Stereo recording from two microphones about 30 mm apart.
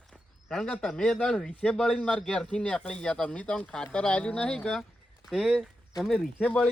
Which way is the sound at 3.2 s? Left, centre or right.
Left.